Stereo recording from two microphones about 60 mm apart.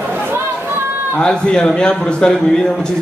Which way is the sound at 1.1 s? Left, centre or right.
Centre.